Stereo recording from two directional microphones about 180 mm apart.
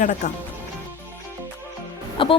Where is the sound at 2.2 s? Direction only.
30° left (ahead or behind).